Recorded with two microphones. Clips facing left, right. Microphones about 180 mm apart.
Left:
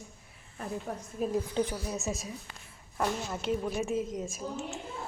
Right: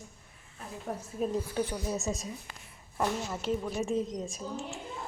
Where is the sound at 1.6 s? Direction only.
20° left (ahead or behind).